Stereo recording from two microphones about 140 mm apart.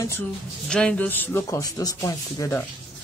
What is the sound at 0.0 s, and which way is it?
Speech, 20° left (ahead or behind).